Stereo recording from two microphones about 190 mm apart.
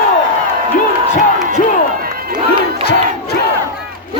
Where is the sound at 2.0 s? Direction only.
50° right (ahead or behind).